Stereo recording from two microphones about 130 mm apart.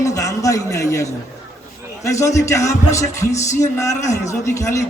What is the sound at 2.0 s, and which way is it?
A man's voice, 25° left (ahead or behind).